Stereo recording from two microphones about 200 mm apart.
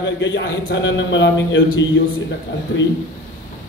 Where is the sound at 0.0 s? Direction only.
65° left (ahead or behind).